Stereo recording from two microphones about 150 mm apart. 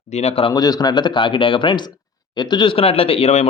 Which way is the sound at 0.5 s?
25° left (ahead or behind).